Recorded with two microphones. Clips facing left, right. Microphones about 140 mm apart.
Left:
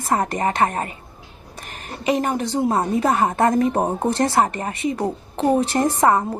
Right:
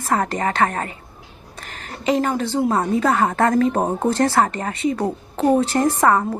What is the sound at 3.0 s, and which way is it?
A woman's voice, 15° left (ahead or behind).